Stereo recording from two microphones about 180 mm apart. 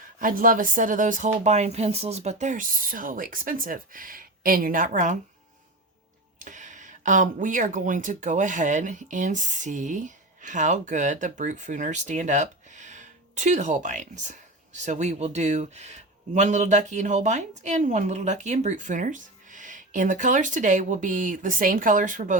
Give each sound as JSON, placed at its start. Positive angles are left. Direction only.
{"t": 0.2, "sound": "speech", "side_deg": -50}
{"t": 6.4, "sound": "speech", "side_deg": -45}